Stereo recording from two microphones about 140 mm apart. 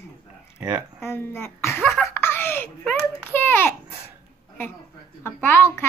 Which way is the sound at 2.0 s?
15° left (ahead or behind).